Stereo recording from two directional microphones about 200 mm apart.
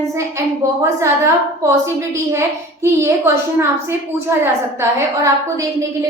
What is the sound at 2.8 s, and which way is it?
Speech, 15° right (ahead or behind).